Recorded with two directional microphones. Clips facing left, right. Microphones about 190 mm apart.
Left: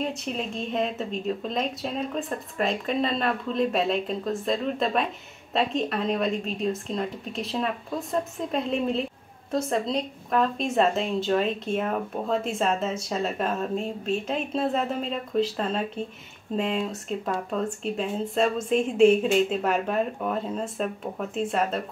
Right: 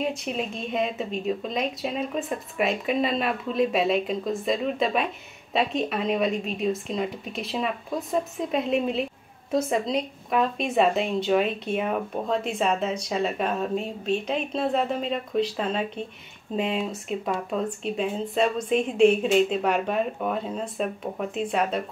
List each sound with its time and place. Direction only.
0.0 s speech: centre (ahead or behind)